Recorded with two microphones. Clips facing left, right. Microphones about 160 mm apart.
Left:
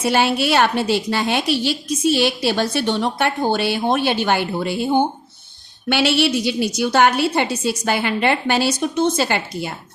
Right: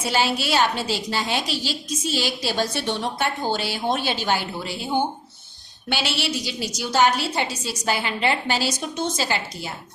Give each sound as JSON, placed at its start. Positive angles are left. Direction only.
{"t": 0.0, "sound": "a woman's voice", "side_deg": 60}